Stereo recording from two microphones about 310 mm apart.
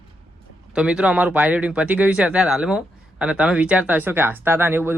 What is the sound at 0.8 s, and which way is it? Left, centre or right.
Speech, centre.